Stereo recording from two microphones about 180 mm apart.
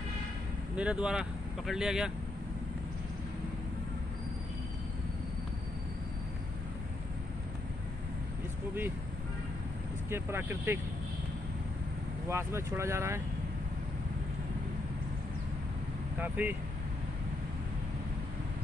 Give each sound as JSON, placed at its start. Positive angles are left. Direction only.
{"t": 0.7, "sound": "speech", "side_deg": -5}
{"t": 10.0, "sound": "speech", "side_deg": -15}
{"t": 12.3, "sound": "speech", "side_deg": -15}
{"t": 16.2, "sound": "speech", "side_deg": -10}